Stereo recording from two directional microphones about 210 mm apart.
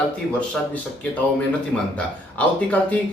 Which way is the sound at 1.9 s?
5° left (ahead or behind).